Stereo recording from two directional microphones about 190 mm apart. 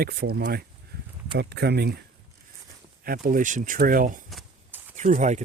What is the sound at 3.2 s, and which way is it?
Speech, 45° right (ahead or behind).